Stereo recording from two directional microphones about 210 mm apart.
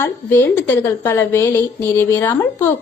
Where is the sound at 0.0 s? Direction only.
10° left (ahead or behind).